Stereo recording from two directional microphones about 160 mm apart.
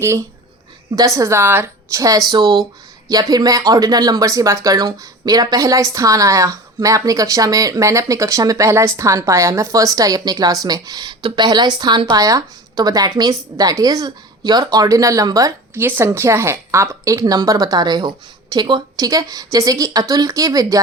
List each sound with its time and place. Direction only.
0.9 s speech: 20° right (ahead or behind)